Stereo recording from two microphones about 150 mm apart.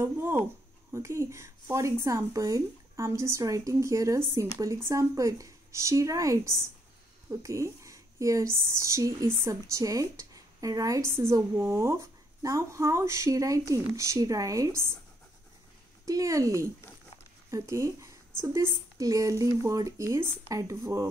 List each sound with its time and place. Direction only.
0.0 s speech: 15° right (ahead or behind)
16.1 s speech: 20° right (ahead or behind)